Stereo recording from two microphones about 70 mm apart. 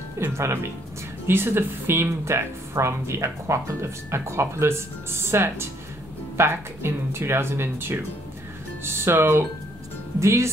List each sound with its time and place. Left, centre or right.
0.2 s speech: right